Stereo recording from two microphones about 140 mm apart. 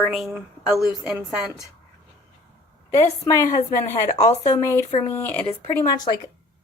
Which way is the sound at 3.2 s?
25° left (ahead or behind).